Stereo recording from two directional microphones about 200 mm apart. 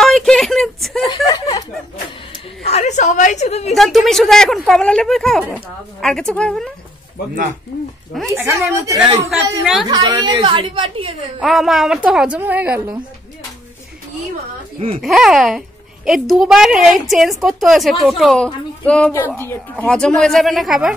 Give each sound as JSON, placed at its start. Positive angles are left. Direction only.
{"t": 0.0, "sound": "a sound", "side_deg": 0}
{"t": 1.0, "sound": "chuckle", "side_deg": 20}
{"t": 2.6, "sound": "a sound", "side_deg": 35}
{"t": 3.7, "sound": "a woman's voice", "side_deg": 0}
{"t": 8.3, "sound": "a woman's voice", "side_deg": -15}
{"t": 8.9, "sound": "a woman's voice", "side_deg": -5}
{"t": 9.8, "sound": "a woman's voice", "side_deg": -20}
{"t": 11.4, "sound": "a woman's voice", "side_deg": 0}
{"t": 15.0, "sound": "a woman's voice", "side_deg": 0}